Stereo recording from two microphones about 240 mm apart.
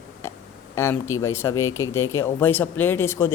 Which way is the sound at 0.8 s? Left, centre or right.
Centre.